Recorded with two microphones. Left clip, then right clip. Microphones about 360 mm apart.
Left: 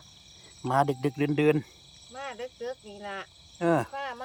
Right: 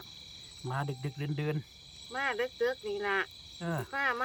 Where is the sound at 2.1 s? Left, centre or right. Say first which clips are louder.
Right 5 dB; centre.